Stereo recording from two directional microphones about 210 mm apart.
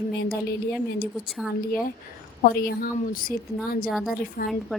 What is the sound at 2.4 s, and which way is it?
A woman's voice, 45° left (ahead or behind).